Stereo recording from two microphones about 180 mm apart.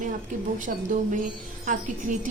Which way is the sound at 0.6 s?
45° right (ahead or behind).